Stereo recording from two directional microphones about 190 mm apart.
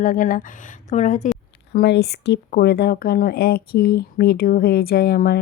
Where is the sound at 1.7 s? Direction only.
60° left (ahead or behind).